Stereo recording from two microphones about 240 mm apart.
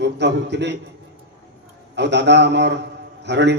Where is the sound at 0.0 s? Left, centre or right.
Right.